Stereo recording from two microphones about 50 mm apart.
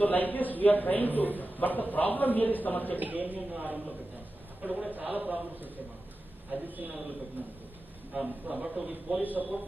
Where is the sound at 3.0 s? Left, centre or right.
Right.